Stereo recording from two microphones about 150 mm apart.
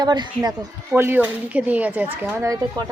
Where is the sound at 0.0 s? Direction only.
30° right (ahead or behind).